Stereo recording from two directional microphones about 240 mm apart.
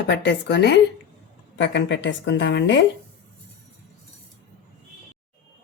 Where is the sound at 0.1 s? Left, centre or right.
Left.